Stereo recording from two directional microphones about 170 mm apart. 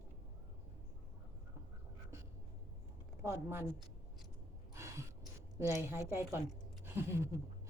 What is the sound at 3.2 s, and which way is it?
Speech, 15° right (ahead or behind).